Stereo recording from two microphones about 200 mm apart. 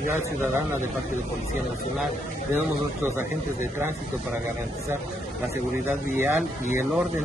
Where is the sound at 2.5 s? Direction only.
10° right (ahead or behind).